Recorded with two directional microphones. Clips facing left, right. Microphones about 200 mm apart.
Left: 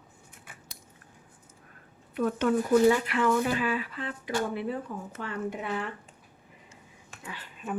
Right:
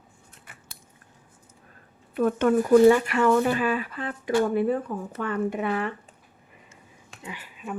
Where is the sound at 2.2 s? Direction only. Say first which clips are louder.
Right 5 dB; 55° right (ahead or behind).